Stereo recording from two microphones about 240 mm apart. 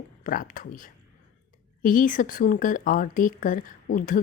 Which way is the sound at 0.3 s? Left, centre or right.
Left.